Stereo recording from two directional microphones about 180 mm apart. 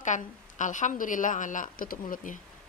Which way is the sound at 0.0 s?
45° left (ahead or behind).